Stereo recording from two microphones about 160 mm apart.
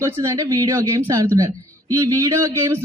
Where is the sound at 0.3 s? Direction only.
20° right (ahead or behind).